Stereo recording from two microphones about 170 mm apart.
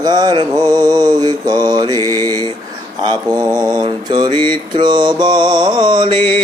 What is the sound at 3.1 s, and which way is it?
Mantra, 25° right (ahead or behind).